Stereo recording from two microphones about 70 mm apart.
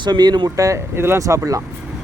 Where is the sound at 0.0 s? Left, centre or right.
Right.